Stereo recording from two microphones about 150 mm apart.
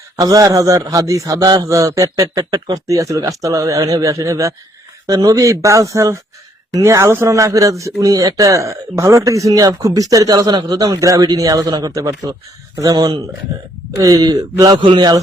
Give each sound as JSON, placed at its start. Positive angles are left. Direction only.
{"t": 0.2, "sound": "speech", "side_deg": -25}